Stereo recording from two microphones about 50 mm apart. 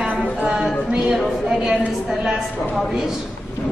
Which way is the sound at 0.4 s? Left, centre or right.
Centre.